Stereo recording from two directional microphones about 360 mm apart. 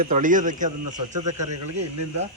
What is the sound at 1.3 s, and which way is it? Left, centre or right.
Speech, right.